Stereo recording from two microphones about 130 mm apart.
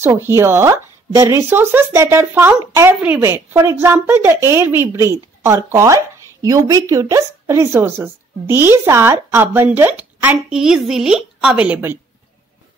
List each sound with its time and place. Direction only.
0.0 s a woman's voice: 15° right (ahead or behind)
10.6 s a woman's voice: 5° right (ahead or behind)